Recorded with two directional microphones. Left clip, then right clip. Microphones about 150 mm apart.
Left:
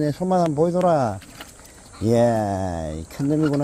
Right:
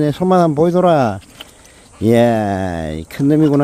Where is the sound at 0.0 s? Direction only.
35° right (ahead or behind).